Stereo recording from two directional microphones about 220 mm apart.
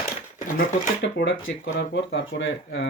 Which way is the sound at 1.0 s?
55° left (ahead or behind).